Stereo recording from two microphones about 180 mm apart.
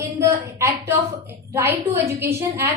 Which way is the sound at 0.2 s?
15° right (ahead or behind).